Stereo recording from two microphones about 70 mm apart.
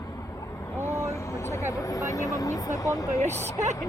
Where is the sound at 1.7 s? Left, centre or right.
Left.